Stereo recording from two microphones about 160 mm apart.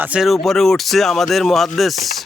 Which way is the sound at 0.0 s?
5° right (ahead or behind).